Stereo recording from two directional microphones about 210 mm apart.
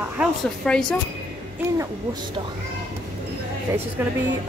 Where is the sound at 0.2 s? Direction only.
Centre (ahead or behind).